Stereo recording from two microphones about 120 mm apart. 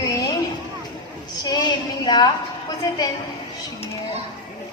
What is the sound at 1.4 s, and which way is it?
A woman's voice, 40° left (ahead or behind).